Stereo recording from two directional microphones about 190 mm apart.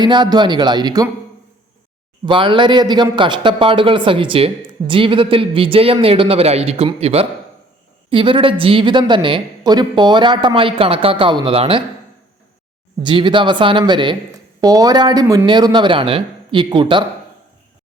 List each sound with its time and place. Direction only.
0.0 s speech: 25° right (ahead or behind)
2.2 s speech: 25° right (ahead or behind)
13.0 s speech: 25° right (ahead or behind)